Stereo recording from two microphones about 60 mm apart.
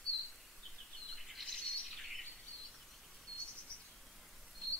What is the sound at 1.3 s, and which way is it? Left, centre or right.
Bird, centre.